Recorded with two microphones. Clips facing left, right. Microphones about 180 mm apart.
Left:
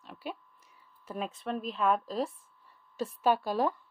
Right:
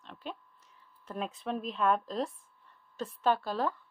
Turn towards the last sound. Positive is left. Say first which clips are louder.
# left 2 dB
turn(degrees=15)  # may be behind; listen again after turning